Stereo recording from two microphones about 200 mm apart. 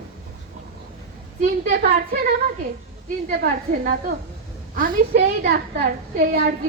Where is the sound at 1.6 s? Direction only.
50° right (ahead or behind).